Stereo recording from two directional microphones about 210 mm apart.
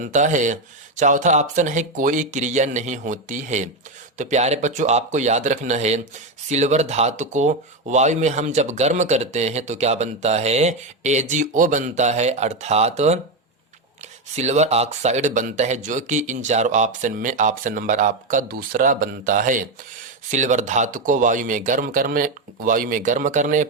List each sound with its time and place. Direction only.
0.0 s speech: 35° right (ahead or behind)
14.3 s speech: 30° right (ahead or behind)